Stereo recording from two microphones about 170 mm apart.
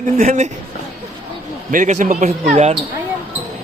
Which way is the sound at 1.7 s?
50° right (ahead or behind).